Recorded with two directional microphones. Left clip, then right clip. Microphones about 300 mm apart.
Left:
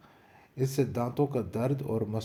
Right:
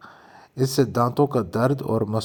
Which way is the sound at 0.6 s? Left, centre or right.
Right.